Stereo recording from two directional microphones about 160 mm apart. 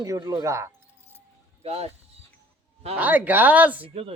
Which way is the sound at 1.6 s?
40° right (ahead or behind).